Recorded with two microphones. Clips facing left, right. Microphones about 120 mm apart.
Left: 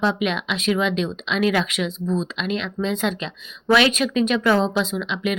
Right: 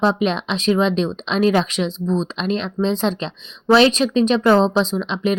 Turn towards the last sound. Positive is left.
turn(degrees=-35)  # may be behind; listen again after turning